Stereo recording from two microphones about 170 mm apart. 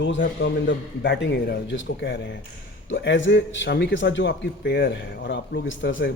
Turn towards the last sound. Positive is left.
turn(degrees=90)